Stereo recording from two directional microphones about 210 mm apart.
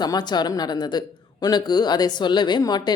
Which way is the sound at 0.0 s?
20° left (ahead or behind).